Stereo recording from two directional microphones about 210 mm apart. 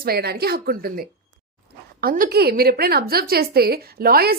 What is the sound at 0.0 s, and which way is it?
A woman's voice, 50° right (ahead or behind).